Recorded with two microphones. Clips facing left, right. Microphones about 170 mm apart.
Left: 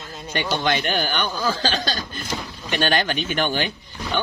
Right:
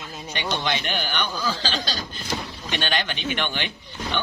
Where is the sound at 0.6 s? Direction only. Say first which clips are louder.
Left 5 dB; 50° left (ahead or behind).